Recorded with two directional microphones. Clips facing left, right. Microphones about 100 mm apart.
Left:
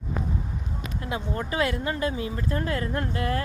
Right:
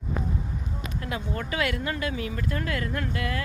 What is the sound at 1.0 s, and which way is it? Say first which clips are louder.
Speech: left 2 dB; 25° left (ahead or behind).